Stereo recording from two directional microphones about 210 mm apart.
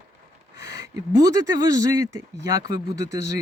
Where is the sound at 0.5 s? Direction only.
50° left (ahead or behind).